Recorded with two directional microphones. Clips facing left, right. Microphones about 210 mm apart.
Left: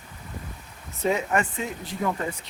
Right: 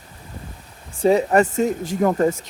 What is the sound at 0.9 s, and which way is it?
Speech, 35° right (ahead or behind).